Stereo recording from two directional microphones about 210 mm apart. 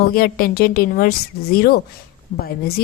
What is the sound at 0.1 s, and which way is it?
A woman's voice, 45° left (ahead or behind).